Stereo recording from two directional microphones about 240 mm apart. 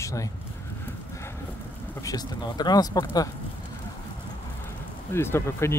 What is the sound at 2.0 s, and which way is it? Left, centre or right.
Speech, centre.